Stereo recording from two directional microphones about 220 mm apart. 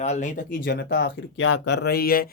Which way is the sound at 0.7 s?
45° left (ahead or behind).